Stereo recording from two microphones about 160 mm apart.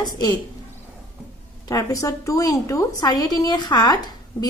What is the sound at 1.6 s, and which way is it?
A woman's voice, 20° left (ahead or behind).